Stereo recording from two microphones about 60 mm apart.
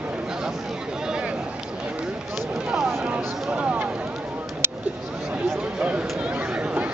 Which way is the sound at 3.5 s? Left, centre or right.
Right.